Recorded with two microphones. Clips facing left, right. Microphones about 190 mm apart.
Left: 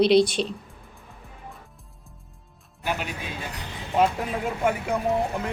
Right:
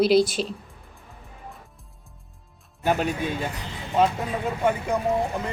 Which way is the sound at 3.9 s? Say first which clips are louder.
Even; centre (ahead or behind).